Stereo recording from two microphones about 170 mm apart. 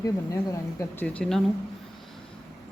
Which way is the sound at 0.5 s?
20° left (ahead or behind).